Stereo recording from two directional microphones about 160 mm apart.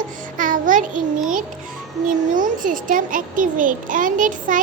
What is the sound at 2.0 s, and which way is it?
A child's voice, 55° right (ahead or behind).